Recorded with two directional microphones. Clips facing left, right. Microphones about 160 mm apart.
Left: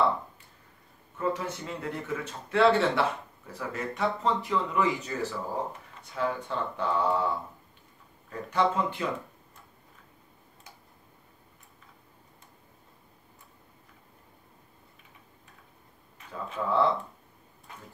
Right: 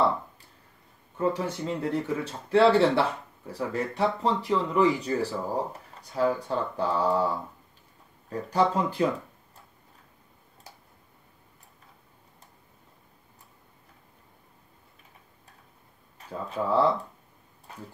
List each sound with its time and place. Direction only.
1.1 s speech: 30° right (ahead or behind)
8.3 s speech: 35° right (ahead or behind)
16.2 s speech: 35° right (ahead or behind)
17.7 s a sound: 35° right (ahead or behind)